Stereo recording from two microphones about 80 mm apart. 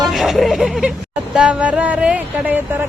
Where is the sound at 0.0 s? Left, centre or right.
Centre.